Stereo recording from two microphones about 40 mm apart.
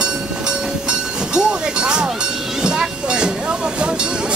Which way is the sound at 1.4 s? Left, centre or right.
Right.